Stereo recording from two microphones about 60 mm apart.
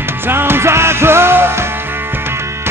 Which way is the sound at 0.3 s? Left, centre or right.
Right.